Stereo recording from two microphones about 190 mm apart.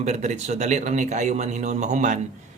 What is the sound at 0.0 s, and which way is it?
Speech, 35° right (ahead or behind).